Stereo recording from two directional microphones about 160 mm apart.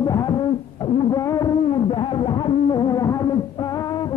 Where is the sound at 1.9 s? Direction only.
30° left (ahead or behind).